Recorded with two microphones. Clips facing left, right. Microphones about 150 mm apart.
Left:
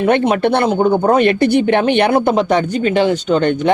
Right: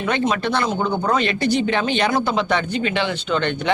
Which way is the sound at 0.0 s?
55° left (ahead or behind).